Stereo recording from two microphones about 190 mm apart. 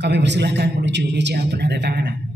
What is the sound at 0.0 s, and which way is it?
A man's voice, 65° right (ahead or behind).